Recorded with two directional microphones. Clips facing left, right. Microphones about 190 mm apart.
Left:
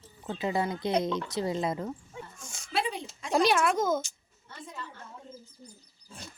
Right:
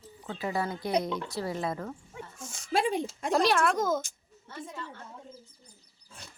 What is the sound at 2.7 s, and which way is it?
Speech, 50° right (ahead or behind).